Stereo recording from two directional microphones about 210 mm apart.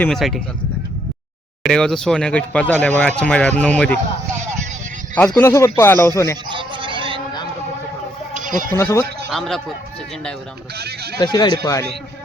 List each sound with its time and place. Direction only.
0.0 s speech: centre (ahead or behind)
1.6 s speech: 5° left (ahead or behind)
5.1 s speech: 5° left (ahead or behind)
6.5 s sheep: 25° right (ahead or behind)
8.3 s a sound: 40° right (ahead or behind)
8.7 s speech: 15° left (ahead or behind)
9.3 s speech: centre (ahead or behind)
10.8 s speech: 50° right (ahead or behind)
11.2 s speech: 20° left (ahead or behind)